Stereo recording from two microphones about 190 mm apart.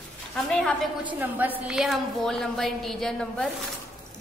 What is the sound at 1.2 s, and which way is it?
A woman's voice, 10° right (ahead or behind).